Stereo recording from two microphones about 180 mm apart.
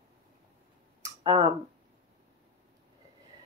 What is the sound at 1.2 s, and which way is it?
Speech, 30° right (ahead or behind).